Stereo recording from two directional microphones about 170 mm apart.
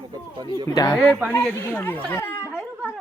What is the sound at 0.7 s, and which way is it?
Speech, 20° left (ahead or behind).